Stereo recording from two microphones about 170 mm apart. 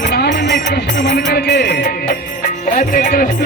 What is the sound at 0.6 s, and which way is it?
Music, 55° left (ahead or behind).